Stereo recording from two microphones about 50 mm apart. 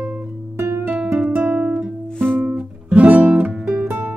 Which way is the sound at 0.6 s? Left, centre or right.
Right.